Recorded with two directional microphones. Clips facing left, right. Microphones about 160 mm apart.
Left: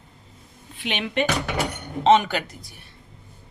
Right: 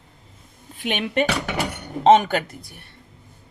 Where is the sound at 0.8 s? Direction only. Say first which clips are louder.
Right 3 dB; 45° right (ahead or behind).